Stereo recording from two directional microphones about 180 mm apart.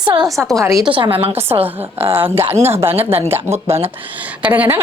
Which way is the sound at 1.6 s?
10° right (ahead or behind).